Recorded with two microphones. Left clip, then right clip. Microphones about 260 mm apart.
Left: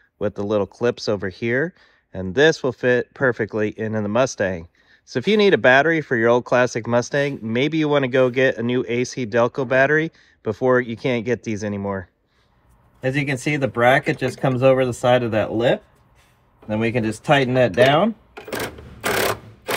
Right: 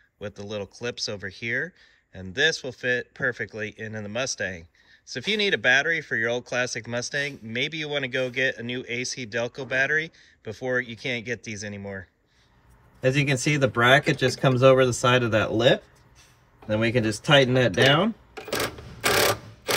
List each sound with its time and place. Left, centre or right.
0.2 s speech: centre
11.8 s speech: left
13.0 s speech: centre
16.6 s speech: centre